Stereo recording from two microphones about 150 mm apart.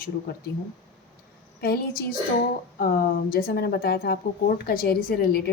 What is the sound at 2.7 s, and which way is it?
Speech, 70° left (ahead or behind).